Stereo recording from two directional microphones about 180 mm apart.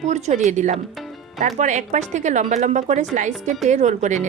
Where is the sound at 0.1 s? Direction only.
40° right (ahead or behind).